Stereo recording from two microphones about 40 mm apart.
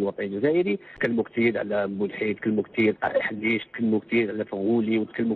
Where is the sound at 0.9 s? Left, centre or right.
Left.